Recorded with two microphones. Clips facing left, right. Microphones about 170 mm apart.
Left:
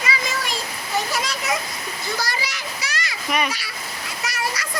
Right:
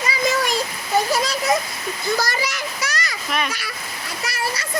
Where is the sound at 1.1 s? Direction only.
35° right (ahead or behind).